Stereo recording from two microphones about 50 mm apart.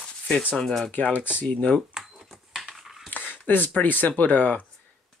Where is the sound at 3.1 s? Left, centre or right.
Left.